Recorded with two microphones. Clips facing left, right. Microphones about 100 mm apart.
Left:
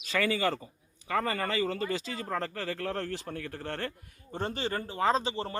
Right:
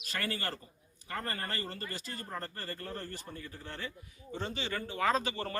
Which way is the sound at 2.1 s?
90° left.